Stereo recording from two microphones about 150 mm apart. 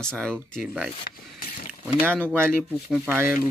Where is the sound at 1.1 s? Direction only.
75° left (ahead or behind).